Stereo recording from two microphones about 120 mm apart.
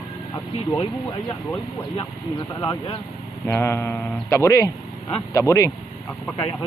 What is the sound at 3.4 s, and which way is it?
A man's voice, 20° left (ahead or behind).